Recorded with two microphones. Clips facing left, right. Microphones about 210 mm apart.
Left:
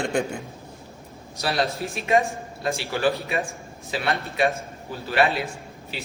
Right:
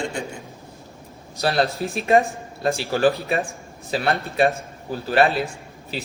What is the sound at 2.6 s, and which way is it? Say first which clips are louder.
A man's voice: right 4 dB; 40° right (ahead or behind).